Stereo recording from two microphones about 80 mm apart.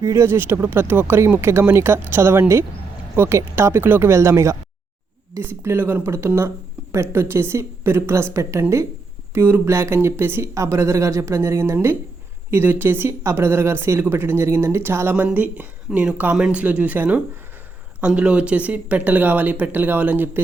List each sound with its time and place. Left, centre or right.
0.0 s speech: right
9.3 s speech: right
15.1 s speech: centre